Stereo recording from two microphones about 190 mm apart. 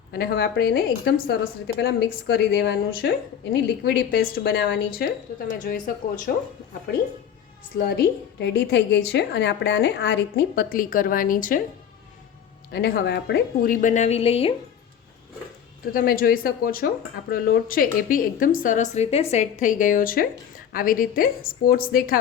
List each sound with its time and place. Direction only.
0.1 s a woman's voice: 55° left (ahead or behind)
7.8 s a woman's voice: 60° left (ahead or behind)
12.7 s speech: 55° left (ahead or behind); by 14.5 s 30° left (ahead or behind)
15.9 s speech: 45° left (ahead or behind)